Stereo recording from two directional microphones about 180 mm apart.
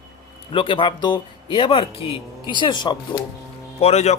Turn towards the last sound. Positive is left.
turn(degrees=35)  # may be behind; listen again after turning